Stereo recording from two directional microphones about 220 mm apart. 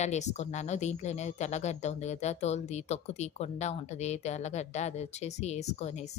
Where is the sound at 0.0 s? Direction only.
30° left (ahead or behind).